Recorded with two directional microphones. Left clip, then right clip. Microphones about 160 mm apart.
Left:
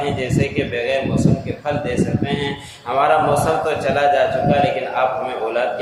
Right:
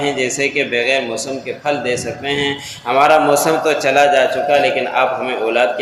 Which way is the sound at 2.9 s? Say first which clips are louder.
Right 4 dB; 30° right (ahead or behind).